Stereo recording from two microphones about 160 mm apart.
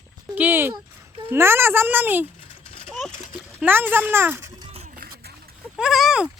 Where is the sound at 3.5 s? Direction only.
10° right (ahead or behind).